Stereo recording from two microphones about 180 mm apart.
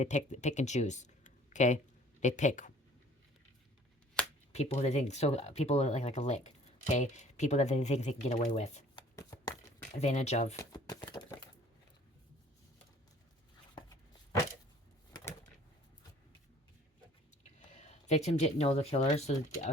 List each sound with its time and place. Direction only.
0.0 s speech: 40° left (ahead or behind)
4.2 s shuffling cards: 5° left (ahead or behind)
4.5 s speech: 40° left (ahead or behind)
9.0 s shuffling cards: 20° left (ahead or behind)
10.0 s speech: 40° left (ahead or behind)
10.6 s a sound: 20° left (ahead or behind)
13.7 s a sound: 20° left (ahead or behind)
17.7 s speech: 40° left (ahead or behind)